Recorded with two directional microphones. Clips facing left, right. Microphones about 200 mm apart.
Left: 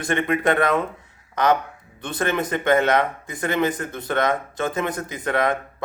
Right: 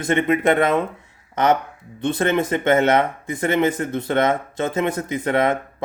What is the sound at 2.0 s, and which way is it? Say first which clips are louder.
Speech: right 5 dB; 25° right (ahead or behind).